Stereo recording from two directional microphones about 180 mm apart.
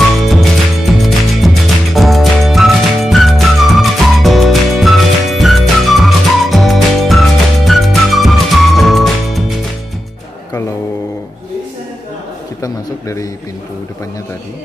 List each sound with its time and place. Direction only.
1.0 s music: centre (ahead or behind)
12.6 s a man's voice: 20° left (ahead or behind)